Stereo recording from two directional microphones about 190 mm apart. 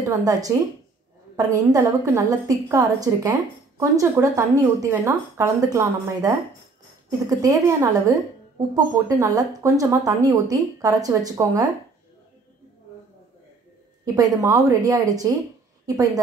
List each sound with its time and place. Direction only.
0.0 s a woman's voice: 20° right (ahead or behind)
14.0 s a woman's voice: 15° right (ahead or behind)